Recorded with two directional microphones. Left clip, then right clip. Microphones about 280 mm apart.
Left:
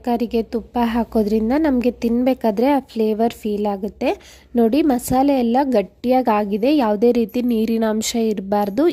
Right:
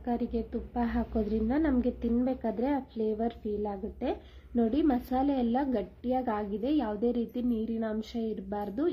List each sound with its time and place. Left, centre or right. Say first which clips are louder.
0.0 s a woman's voice: left 13 dB; left